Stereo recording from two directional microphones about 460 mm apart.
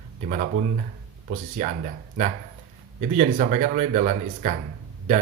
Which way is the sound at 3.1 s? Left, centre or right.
Centre.